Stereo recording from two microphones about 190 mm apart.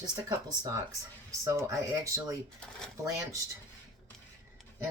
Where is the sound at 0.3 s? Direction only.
20° right (ahead or behind).